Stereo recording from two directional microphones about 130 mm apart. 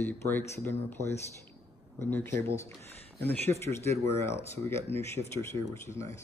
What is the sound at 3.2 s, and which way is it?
Speech, 15° left (ahead or behind).